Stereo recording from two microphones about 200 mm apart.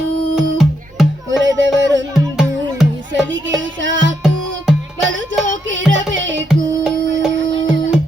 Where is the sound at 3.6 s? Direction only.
70° right (ahead or behind).